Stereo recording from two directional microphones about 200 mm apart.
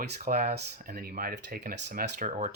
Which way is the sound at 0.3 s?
50° right (ahead or behind).